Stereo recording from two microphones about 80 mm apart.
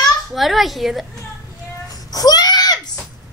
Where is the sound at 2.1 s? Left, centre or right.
Left.